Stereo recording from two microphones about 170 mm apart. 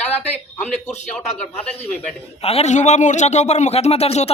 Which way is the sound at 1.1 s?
5° left (ahead or behind).